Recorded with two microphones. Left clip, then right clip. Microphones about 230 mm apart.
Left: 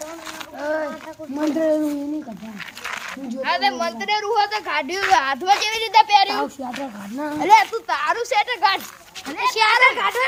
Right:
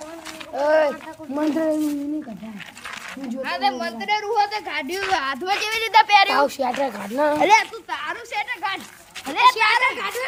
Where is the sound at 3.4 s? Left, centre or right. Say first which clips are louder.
Left 3 dB; centre.